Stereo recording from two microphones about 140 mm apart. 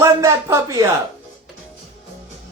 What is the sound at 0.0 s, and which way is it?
Speech, 20° right (ahead or behind).